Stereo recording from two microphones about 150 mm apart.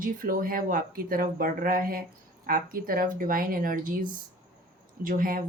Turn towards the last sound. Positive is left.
turn(degrees=-65)  # may be behind; listen again after turning